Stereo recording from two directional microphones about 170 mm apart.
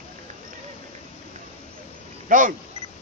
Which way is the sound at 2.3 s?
50° right (ahead or behind).